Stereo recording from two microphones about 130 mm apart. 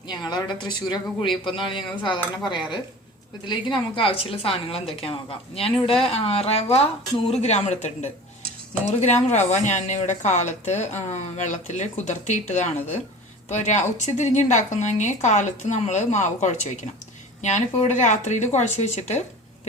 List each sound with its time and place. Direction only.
0.3 s a woman's voice: 35° left (ahead or behind); by 8.1 s 60° left (ahead or behind)
9.3 s speech: 60° left (ahead or behind)